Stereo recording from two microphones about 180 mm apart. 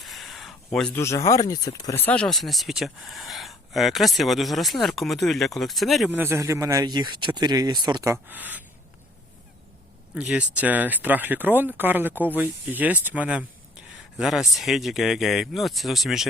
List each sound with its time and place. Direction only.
0.0 s speech: centre (ahead or behind)
6.1 s speech: 10° right (ahead or behind)
10.2 s speech: 5° right (ahead or behind)